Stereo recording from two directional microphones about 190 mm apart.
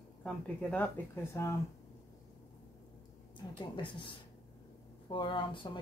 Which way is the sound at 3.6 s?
25° left (ahead or behind).